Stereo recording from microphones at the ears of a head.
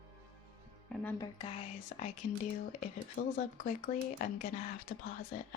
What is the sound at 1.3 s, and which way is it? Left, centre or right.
Speech, left.